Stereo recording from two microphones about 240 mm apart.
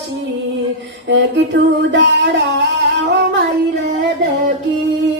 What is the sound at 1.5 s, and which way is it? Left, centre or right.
Music, right.